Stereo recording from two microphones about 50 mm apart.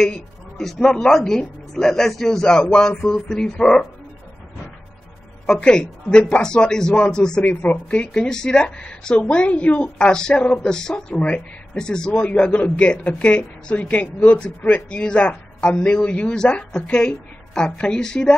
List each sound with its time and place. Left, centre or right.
0.0 s a woman's voice: centre
5.5 s speech: centre
8.1 s speech: centre
12.3 s speech: left